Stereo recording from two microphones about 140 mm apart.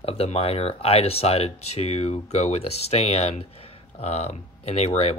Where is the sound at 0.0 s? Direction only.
45° left (ahead or behind).